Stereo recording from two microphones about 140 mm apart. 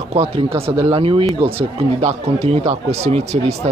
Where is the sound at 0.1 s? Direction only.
45° right (ahead or behind).